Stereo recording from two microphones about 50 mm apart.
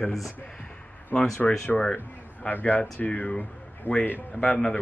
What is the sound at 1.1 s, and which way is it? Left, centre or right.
A man's voice, left.